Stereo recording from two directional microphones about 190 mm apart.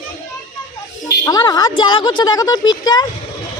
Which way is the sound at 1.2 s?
20° left (ahead or behind).